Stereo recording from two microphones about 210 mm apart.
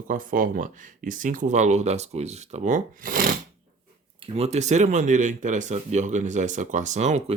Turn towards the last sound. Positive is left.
turn(degrees=-30)  # may be behind; listen again after turning